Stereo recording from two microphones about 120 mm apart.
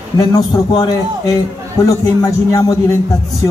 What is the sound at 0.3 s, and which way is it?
A man's voice, 35° left (ahead or behind).